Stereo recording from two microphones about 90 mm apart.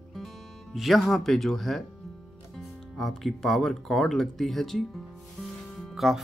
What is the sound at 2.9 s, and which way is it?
Speech, 5° left (ahead or behind).